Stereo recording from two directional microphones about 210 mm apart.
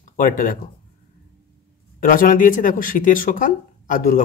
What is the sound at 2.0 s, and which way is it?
Speech, 40° left (ahead or behind).